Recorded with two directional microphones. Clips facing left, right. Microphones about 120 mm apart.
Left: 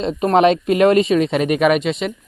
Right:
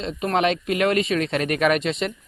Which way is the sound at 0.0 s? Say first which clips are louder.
Left 8 dB; 35° left (ahead or behind).